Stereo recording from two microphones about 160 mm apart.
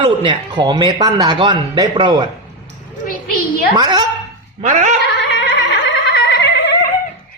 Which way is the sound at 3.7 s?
25° right (ahead or behind).